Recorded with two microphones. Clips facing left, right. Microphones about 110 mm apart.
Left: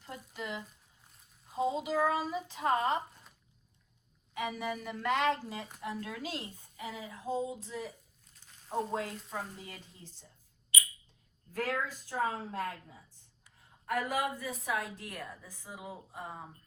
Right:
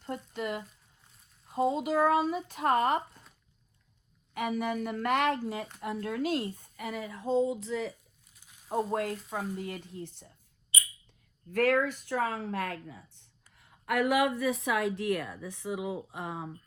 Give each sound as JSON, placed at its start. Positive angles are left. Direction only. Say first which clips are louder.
{"t": 0.3, "sound": "speech", "louder": "right 5 dB", "side_deg": -50}
{"t": 1.0, "sound": "a sound", "louder": "right 2 dB", "side_deg": 0}
{"t": 1.8, "sound": "speech", "louder": "right 5 dB", "side_deg": -50}
{"t": 4.4, "sound": "speech", "louder": "right 5 dB", "side_deg": -55}
{"t": 8.3, "sound": "a sound", "louder": "right 4 dB", "side_deg": -10}
{"t": 8.9, "sound": "speech", "louder": "right 5 dB", "side_deg": -55}
{"t": 11.5, "sound": "speech", "louder": "right 9 dB", "side_deg": -70}